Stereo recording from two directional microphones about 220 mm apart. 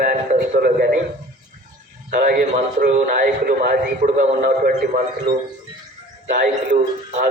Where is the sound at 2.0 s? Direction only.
40° right (ahead or behind).